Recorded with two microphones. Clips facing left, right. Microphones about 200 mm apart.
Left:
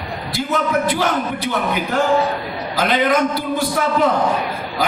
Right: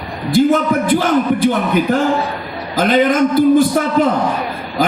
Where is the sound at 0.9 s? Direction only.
50° right (ahead or behind).